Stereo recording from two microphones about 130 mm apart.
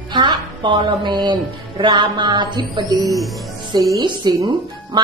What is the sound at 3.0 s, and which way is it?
Speech, centre (ahead or behind).